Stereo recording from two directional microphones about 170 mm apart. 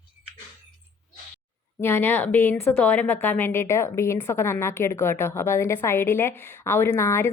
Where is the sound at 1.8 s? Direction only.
15° left (ahead or behind).